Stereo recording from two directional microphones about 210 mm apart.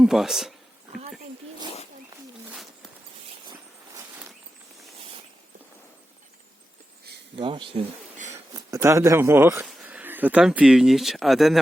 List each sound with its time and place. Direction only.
0.0 s speech: centre (ahead or behind)
2.5 s a sound: centre (ahead or behind)
7.3 s speech: 25° right (ahead or behind)
8.3 s speech: 15° right (ahead or behind)